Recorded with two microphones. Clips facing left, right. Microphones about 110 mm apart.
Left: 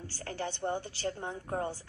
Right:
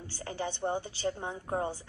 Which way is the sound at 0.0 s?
15° right (ahead or behind).